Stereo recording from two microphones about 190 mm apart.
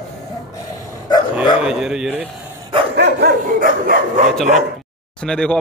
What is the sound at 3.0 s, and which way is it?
Dog, 60° right (ahead or behind).